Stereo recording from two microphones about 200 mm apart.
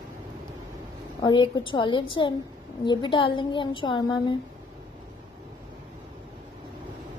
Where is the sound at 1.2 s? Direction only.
25° left (ahead or behind).